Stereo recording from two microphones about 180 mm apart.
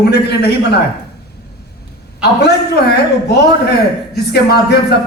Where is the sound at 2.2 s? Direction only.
65° left (ahead or behind).